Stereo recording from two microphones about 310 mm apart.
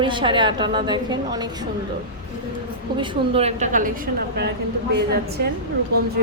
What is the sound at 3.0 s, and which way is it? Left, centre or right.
Speech, centre.